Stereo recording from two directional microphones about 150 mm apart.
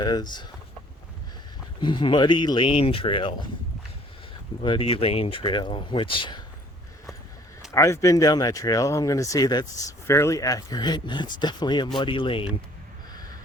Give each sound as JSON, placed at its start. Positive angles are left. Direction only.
{"t": 0.0, "sound": "speech", "side_deg": 30}
{"t": 1.8, "sound": "speech", "side_deg": 35}
{"t": 4.6, "sound": "speech", "side_deg": 35}
{"t": 7.7, "sound": "speech", "side_deg": 20}